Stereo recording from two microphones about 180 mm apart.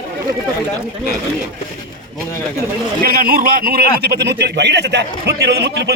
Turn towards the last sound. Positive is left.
turn(degrees=-65)  # may be behind; listen again after turning